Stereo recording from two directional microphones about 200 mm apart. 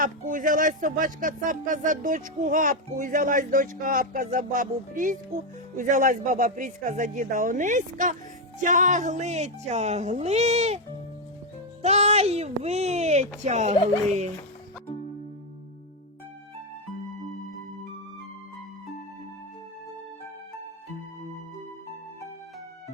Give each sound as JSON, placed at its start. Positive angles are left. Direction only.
{"t": 0.0, "sound": "speech", "side_deg": -45}
{"t": 11.8, "sound": "speech", "side_deg": -35}